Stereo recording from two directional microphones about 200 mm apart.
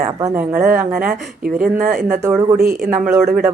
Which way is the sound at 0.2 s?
15° right (ahead or behind).